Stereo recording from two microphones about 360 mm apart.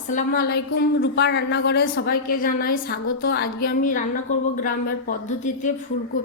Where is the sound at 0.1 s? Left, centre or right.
Left.